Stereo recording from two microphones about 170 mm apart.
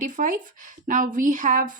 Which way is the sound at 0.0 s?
50° right (ahead or behind).